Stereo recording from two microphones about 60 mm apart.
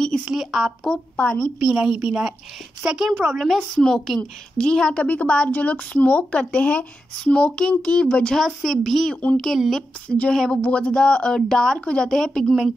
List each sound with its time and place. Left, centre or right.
0.3 s speech: centre
1.1 s speech: centre
1.6 s a woman's voice: centre
4.2 s speech: centre
8.4 s speech: centre
9.1 s speech: centre
10.3 s speech: centre
10.6 s speech: centre